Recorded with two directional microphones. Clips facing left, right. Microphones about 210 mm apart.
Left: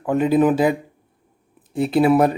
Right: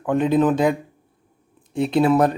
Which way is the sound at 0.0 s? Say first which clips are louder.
Left 1 dB; 5° left (ahead or behind).